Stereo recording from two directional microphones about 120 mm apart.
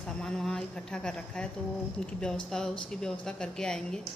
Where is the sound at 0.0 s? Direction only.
5° left (ahead or behind).